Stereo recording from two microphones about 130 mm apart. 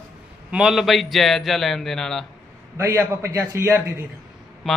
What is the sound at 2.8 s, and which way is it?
A man's voice, 20° right (ahead or behind).